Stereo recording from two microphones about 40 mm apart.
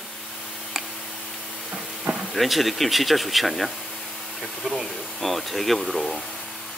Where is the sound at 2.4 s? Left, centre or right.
Centre.